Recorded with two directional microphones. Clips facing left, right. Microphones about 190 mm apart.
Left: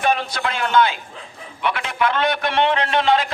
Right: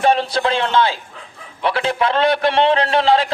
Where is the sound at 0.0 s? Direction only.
30° right (ahead or behind).